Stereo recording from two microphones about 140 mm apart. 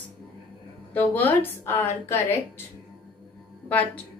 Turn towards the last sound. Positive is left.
turn(degrees=10)  # may be behind; listen again after turning